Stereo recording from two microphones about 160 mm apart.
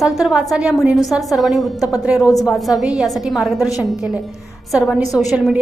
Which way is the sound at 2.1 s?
20° left (ahead or behind).